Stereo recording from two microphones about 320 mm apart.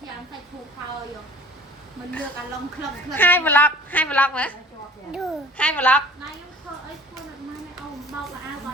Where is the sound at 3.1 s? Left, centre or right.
Centre.